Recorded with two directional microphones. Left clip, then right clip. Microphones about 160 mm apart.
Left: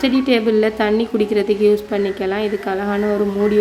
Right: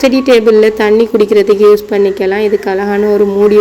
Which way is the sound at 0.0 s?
25° right (ahead or behind).